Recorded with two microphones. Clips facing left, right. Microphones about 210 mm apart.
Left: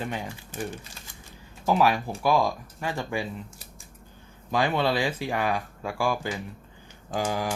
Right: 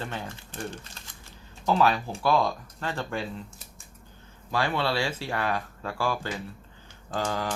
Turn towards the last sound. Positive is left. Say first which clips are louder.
# left 2 dB
turn(degrees=10)  # may be behind; listen again after turning